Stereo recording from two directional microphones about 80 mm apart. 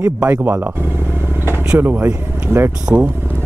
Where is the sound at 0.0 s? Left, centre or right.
Right.